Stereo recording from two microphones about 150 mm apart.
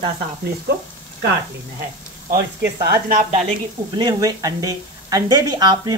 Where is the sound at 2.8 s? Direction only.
80° right.